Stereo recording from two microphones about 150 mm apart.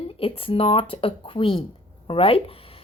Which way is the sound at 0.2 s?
40° left (ahead or behind).